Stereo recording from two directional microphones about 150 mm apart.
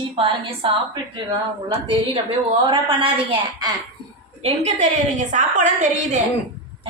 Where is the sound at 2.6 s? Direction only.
35° right (ahead or behind).